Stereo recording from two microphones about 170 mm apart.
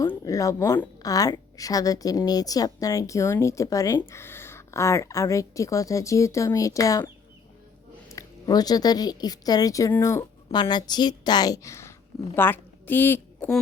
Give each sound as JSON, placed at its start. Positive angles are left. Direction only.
{"t": 0.0, "sound": "a woman's voice", "side_deg": 20}
{"t": 8.1, "sound": "a woman's voice", "side_deg": 25}